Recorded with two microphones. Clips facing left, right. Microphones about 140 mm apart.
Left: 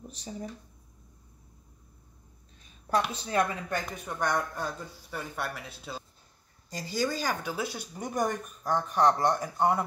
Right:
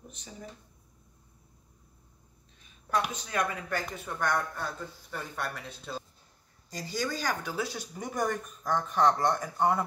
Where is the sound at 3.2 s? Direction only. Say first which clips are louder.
Left 3 dB; 30° left (ahead or behind).